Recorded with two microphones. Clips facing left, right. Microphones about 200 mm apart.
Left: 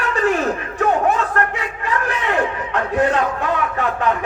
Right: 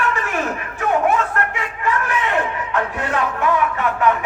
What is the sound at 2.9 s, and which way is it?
Speech, 35° left (ahead or behind).